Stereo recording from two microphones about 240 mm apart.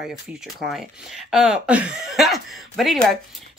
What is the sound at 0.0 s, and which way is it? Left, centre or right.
Speech, centre.